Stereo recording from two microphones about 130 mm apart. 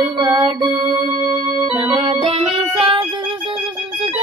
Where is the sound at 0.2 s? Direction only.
45° right (ahead or behind).